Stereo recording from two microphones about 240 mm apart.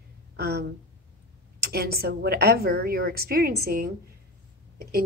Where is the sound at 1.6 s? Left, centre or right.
Right.